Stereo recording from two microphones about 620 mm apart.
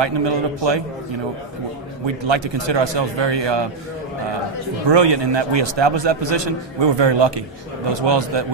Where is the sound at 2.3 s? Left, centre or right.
Right.